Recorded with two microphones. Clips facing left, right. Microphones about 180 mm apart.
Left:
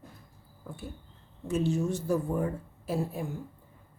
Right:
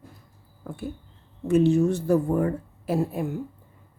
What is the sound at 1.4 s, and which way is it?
Speech, 65° right (ahead or behind).